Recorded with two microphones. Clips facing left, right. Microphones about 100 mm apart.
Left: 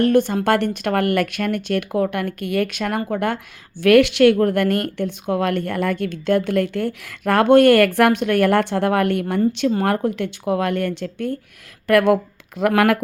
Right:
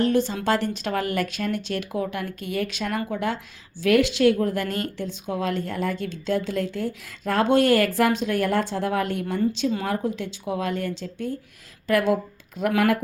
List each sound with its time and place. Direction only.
0.0 s speech: 55° left (ahead or behind)
12.5 s speech: 85° left